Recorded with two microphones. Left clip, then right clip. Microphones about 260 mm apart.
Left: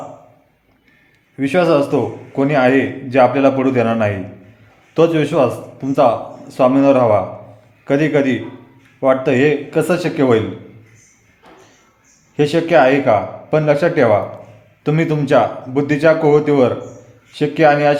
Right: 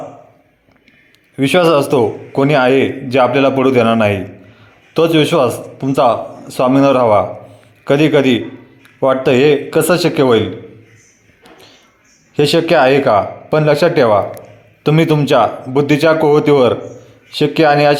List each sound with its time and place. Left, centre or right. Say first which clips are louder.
1.4 s a man's voice: right 3 dB; centre
12.4 s a man's voice: right 2 dB; centre